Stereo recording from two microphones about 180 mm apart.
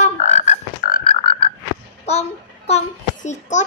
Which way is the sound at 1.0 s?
30° left (ahead or behind).